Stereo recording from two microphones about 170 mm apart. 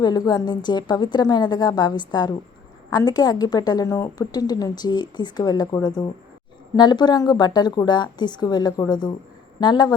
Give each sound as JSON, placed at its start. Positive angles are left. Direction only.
{"t": 0.0, "sound": "a woman's voice", "side_deg": 25}